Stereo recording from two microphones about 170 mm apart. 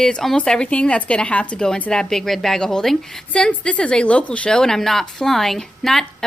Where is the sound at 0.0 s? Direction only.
5° left (ahead or behind).